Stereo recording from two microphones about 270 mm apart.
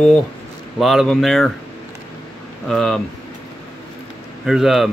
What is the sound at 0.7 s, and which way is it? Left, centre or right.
Speech, centre.